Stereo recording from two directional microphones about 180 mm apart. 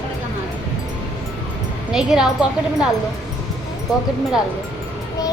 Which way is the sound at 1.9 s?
5° right (ahead or behind).